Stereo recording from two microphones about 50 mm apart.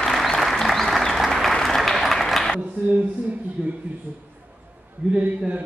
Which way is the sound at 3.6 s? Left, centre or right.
Right.